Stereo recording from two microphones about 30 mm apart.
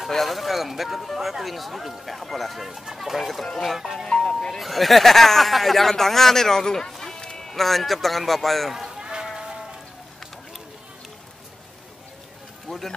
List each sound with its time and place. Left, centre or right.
0.1 s speech: centre
3.8 s music: centre
4.1 s music: left
4.6 s speech: centre
6.9 s run: centre
7.2 s run: left
7.5 s speech: centre
8.7 s a sound: centre
9.0 s music: right
12.6 s speech: centre